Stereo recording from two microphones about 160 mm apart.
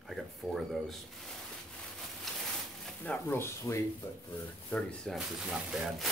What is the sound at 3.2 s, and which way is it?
Speech, 15° left (ahead or behind).